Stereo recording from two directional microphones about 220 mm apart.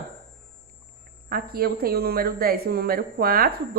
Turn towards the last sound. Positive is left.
turn(degrees=-40)  # may be behind; listen again after turning